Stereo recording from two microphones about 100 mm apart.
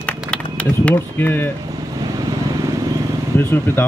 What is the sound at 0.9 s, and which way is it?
Speech, 20° left (ahead or behind).